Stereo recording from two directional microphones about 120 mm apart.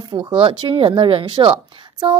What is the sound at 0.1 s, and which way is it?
A woman's voice, 40° right (ahead or behind).